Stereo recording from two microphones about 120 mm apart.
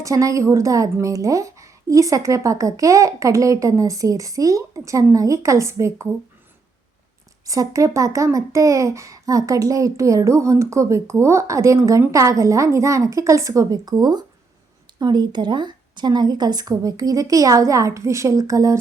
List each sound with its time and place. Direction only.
0.0 s speech: 25° right (ahead or behind)
7.4 s speech: 30° right (ahead or behind)